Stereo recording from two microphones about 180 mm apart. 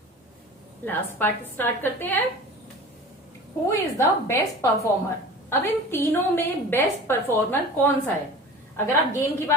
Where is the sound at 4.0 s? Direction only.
15° left (ahead or behind).